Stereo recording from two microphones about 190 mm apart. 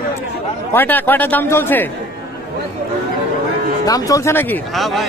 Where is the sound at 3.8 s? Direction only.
20° left (ahead or behind).